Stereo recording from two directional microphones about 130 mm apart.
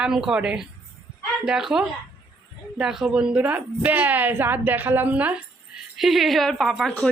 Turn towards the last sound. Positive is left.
turn(degrees=0)  # may be behind; listen again after turning